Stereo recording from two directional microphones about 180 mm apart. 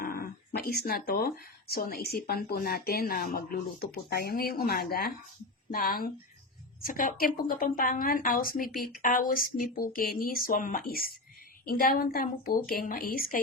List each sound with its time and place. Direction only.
0.0 s a woman's voice: 55° left (ahead or behind)